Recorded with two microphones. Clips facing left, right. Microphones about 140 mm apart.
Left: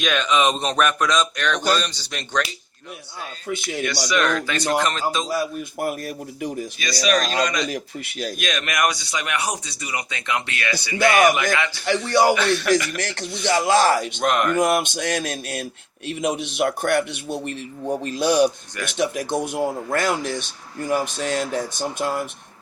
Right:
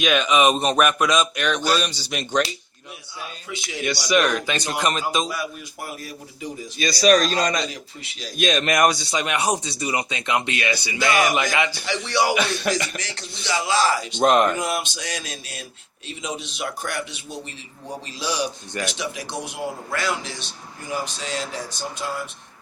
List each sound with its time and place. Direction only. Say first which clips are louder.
0.0 s speech: right 2 dB; 10° right (ahead or behind)
3.4 s speech: left 11 dB; 50° left (ahead or behind)
4.1 s speech: right 2 dB; 15° right (ahead or behind)
5.8 s speech: left 8 dB; 55° left (ahead or behind)
6.7 s a man's voice: right 5 dB; 35° right (ahead or behind)
7.7 s a man's voice: left 8 dB; 55° left (ahead or behind)
8.4 s speech: right 5 dB; 30° right (ahead or behind)
10.9 s a man's voice: left 5 dB; 55° left (ahead or behind)
11.5 s speech: right 1 dB; 15° right (ahead or behind)
11.9 s speech: left 8 dB; 45° left (ahead or behind)
12.3 s speech: left 3 dB; 20° right (ahead or behind)
13.0 s speech: left 8 dB; 55° left (ahead or behind)
14.2 s speech: right 4 dB; 25° right (ahead or behind)
14.5 s a man's voice: left 7 dB; 55° left (ahead or behind)